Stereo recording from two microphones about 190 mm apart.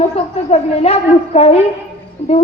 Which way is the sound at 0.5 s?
35° left (ahead or behind).